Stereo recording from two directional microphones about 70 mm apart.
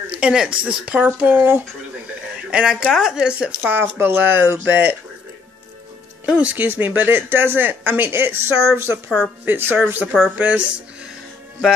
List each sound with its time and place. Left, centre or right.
0.1 s speech: centre
2.5 s speech: centre
4.0 s speech: right
6.2 s speech: right